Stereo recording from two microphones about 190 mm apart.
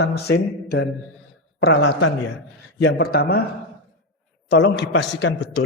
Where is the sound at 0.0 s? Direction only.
55° left (ahead or behind).